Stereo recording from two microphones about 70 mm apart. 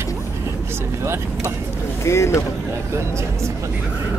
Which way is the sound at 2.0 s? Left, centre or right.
Left.